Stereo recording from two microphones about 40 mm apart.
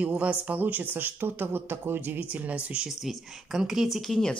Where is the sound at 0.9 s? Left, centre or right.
Right.